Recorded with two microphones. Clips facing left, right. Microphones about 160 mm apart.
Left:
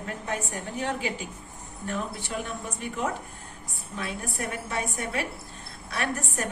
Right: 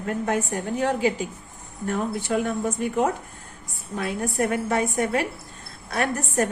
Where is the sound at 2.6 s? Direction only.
50° right (ahead or behind).